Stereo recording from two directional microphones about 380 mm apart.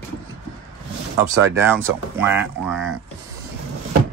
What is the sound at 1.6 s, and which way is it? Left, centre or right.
Speech, centre.